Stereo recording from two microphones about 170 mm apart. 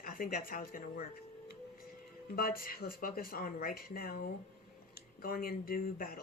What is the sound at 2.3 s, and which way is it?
A man's voice, 60° left (ahead or behind).